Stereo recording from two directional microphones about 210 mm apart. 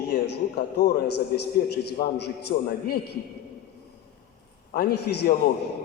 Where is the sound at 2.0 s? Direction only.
50° left (ahead or behind).